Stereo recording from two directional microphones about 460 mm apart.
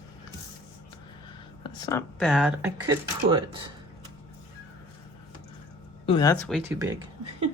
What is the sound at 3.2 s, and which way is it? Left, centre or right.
Speech, right.